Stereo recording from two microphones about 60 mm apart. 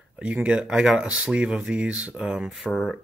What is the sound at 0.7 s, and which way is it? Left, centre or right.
Speech, centre.